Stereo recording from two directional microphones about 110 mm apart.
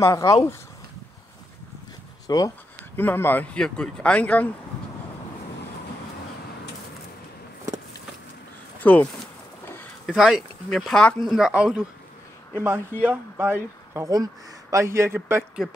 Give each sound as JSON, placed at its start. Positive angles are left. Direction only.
{"t": 0.0, "sound": "speech", "side_deg": 25}
{"t": 2.2, "sound": "speech", "side_deg": 35}
{"t": 3.0, "sound": "speech", "side_deg": 20}
{"t": 3.5, "sound": "speech", "side_deg": 5}
{"t": 8.8, "sound": "speech", "side_deg": 15}
{"t": 10.1, "sound": "speech", "side_deg": -5}
{"t": 12.5, "sound": "speech", "side_deg": -20}